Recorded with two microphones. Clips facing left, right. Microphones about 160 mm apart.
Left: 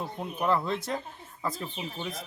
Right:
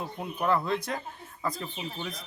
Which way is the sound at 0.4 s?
Centre (ahead or behind).